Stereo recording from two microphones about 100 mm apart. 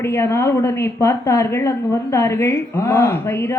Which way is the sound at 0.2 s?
25° left (ahead or behind).